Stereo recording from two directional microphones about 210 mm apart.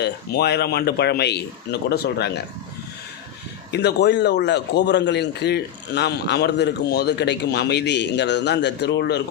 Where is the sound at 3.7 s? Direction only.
55° left (ahead or behind).